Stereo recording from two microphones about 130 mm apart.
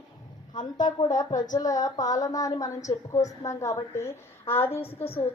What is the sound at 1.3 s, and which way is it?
Speech, 75° left (ahead or behind).